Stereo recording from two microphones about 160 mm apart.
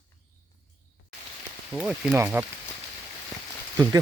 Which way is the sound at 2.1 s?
15° right (ahead or behind).